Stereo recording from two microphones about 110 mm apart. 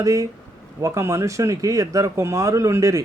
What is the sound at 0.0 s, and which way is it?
Speech, 30° right (ahead or behind).